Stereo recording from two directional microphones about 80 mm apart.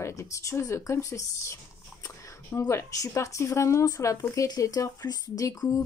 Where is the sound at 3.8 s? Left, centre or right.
Left.